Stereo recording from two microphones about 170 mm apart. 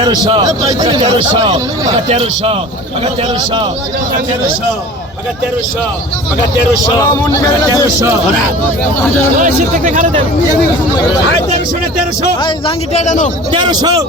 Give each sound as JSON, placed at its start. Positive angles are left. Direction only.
{"t": 0.0, "sound": "a man's voice", "side_deg": -25}
{"t": 2.0, "sound": "a man's voice", "side_deg": -35}
{"t": 9.4, "sound": "speech", "side_deg": -45}
{"t": 12.4, "sound": "a man's voice", "side_deg": 30}
{"t": 13.5, "sound": "a man's voice", "side_deg": -25}